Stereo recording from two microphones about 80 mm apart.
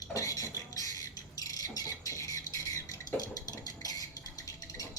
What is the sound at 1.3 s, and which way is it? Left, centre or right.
Bird, left.